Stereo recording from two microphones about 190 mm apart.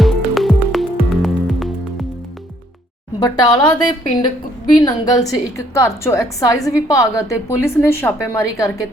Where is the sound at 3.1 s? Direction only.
20° left (ahead or behind).